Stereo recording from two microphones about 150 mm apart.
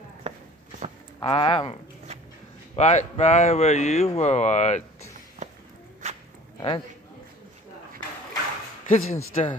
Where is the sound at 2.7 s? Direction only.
50° left (ahead or behind).